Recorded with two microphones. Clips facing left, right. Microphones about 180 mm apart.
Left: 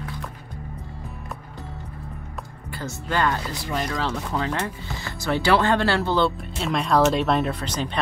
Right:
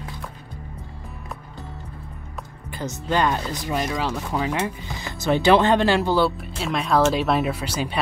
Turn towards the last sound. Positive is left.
turn(degrees=-10)  # may be behind; listen again after turning